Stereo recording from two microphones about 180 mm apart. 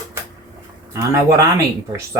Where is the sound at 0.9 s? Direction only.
15° right (ahead or behind).